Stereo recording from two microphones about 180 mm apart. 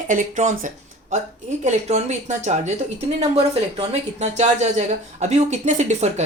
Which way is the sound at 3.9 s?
40° right (ahead or behind).